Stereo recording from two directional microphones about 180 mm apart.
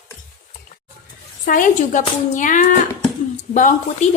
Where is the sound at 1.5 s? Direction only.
45° left (ahead or behind).